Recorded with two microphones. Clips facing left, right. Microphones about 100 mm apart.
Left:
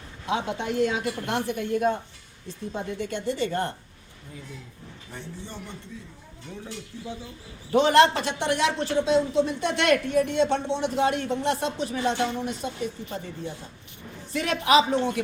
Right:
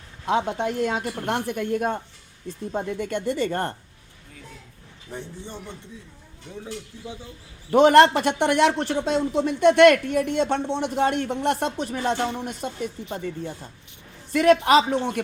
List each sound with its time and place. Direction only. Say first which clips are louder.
0.3 s speech: right 4 dB; 50° right (ahead or behind)
5.1 s a man's voice: right 3 dB; 20° right (ahead or behind)
7.7 s speech: right 4 dB; 55° right (ahead or behind)
14.3 s speech: right 5 dB; 50° right (ahead or behind)